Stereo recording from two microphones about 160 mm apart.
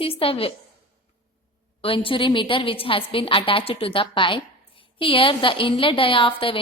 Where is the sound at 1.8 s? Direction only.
35° left (ahead or behind).